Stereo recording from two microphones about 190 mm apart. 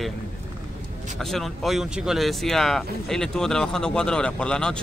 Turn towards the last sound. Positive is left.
turn(degrees=5)  # may be behind; listen again after turning